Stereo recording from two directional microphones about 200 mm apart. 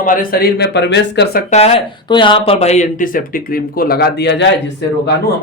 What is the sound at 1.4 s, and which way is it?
A man's voice, 30° left (ahead or behind).